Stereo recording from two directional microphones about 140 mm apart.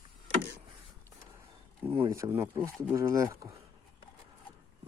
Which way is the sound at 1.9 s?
40° right (ahead or behind).